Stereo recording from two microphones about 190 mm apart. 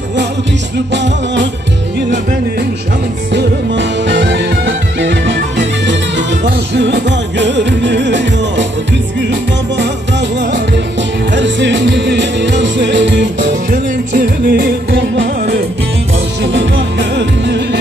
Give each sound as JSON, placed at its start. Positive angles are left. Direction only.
{"t": 0.9, "sound": "music", "side_deg": -70}
{"t": 3.3, "sound": "music", "side_deg": -70}
{"t": 10.4, "sound": "music", "side_deg": -70}
{"t": 14.1, "sound": "music", "side_deg": -60}
{"t": 16.5, "sound": "music", "side_deg": -70}